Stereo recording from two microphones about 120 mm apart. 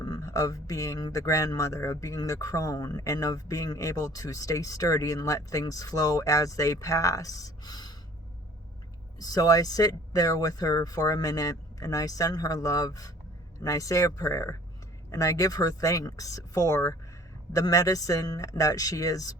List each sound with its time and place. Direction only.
0.0 s speech: 30° left (ahead or behind)
9.1 s speech: 30° left (ahead or behind)